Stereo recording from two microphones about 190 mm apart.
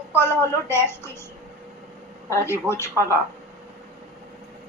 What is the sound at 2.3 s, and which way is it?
Speech, 15° left (ahead or behind).